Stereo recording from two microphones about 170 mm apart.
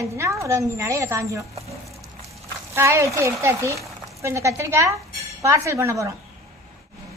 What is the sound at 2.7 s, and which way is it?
A woman's voice, 15° right (ahead or behind).